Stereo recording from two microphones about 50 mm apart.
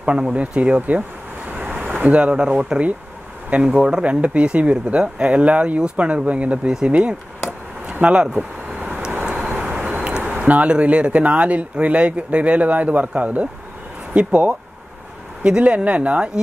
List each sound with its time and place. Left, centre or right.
0.0 s speech: right
8.7 s vehicle: right
10.4 s speech: right